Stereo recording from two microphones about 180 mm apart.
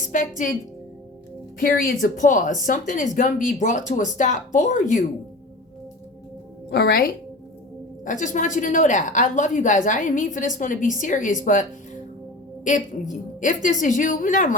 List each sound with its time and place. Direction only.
0.0 s a woman's voice: 45° left (ahead or behind)
1.5 s a woman's voice: 50° left (ahead or behind)
6.7 s a woman's voice: 65° left (ahead or behind)
8.0 s a woman's voice: 45° left (ahead or behind)
12.6 s a woman's voice: 45° left (ahead or behind)